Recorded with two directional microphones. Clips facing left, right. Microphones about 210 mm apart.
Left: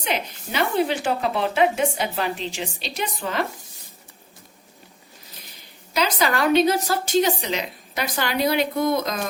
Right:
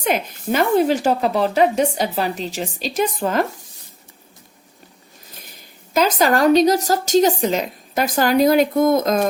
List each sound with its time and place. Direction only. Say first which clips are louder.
0.0 s a woman's voice: right 6 dB; 50° right (ahead or behind)
5.4 s speech: right 3 dB; 50° right (ahead or behind)